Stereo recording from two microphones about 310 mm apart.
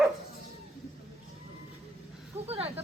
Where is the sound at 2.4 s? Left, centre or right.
Centre.